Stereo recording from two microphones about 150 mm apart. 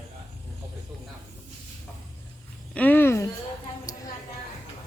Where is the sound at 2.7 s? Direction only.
10° left (ahead or behind).